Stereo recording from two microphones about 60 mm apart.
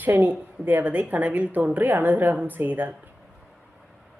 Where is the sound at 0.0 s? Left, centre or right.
Right.